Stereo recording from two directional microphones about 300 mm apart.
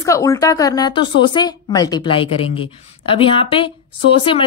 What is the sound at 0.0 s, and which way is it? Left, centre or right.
A woman's voice, centre.